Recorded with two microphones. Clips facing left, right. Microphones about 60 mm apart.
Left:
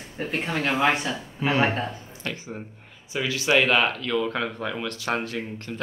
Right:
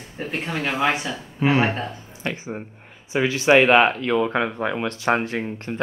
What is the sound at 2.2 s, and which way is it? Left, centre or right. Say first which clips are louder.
Speech: right 5 dB; right.